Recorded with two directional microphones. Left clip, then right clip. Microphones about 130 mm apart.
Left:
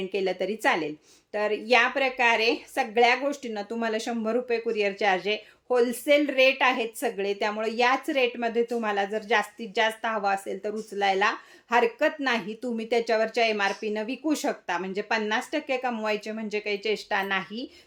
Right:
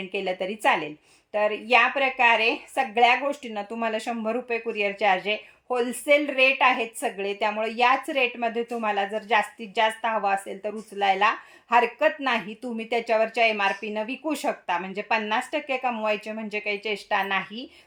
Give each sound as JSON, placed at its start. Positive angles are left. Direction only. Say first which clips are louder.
{"t": 0.1, "sound": "a woman's voice", "louder": "right 1 dB", "side_deg": -10}